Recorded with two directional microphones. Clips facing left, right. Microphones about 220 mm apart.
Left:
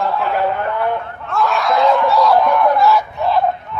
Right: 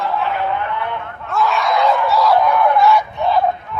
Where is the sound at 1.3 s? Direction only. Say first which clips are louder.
Left 1 dB; centre (ahead or behind).